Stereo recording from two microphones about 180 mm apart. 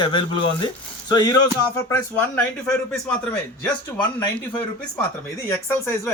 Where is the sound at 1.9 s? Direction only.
10° left (ahead or behind).